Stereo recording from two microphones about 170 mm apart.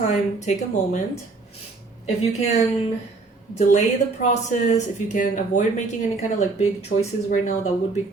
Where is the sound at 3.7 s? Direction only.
45° left (ahead or behind).